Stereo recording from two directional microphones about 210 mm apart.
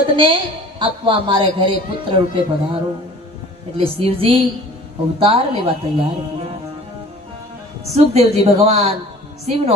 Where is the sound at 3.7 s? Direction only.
25° right (ahead or behind).